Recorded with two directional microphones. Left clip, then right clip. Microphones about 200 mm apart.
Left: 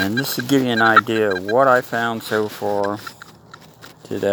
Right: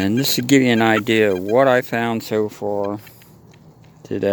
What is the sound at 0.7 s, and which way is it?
Speech, 30° right (ahead or behind).